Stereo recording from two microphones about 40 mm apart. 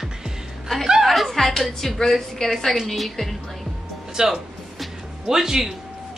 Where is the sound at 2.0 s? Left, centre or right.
Centre.